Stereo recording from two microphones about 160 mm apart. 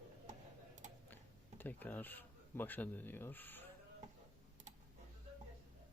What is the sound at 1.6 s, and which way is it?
Speech, 10° left (ahead or behind).